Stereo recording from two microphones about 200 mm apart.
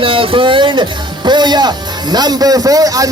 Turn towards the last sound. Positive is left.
turn(degrees=-15)  # may be behind; listen again after turning